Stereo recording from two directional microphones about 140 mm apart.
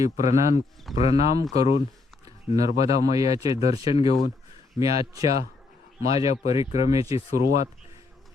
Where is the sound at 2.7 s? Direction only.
45° left (ahead or behind).